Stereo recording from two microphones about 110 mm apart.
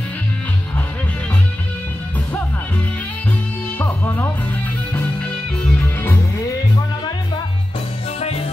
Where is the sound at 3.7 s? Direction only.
15° left (ahead or behind).